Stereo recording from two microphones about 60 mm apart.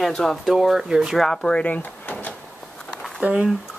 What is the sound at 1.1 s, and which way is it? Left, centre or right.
Speech, centre.